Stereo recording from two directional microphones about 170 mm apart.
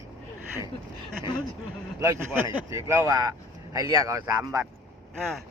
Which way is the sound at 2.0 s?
20° right (ahead or behind).